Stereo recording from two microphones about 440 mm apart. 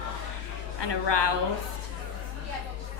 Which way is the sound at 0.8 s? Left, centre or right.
Left.